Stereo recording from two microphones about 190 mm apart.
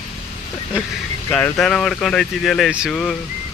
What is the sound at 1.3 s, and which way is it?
Speech, 5° left (ahead or behind).